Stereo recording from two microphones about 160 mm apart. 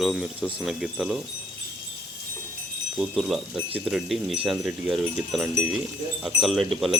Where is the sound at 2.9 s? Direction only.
Centre (ahead or behind).